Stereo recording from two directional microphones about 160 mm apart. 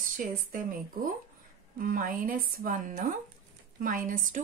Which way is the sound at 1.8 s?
60° right (ahead or behind).